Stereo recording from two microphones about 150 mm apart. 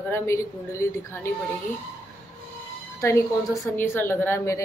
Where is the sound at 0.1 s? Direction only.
20° left (ahead or behind).